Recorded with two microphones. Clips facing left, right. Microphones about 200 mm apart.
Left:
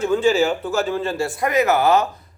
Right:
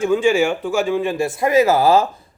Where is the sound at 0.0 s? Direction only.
10° right (ahead or behind).